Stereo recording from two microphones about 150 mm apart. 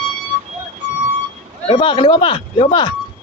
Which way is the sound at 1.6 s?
35° left (ahead or behind).